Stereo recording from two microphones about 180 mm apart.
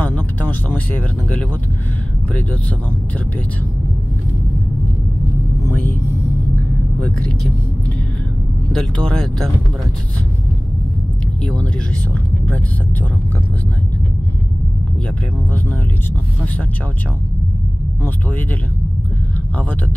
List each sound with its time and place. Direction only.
0.0 s music: 10° left (ahead or behind)
7.0 s speech: 5° left (ahead or behind)
8.7 s speech: 5° left (ahead or behind)
11.4 s speech: 5° left (ahead or behind)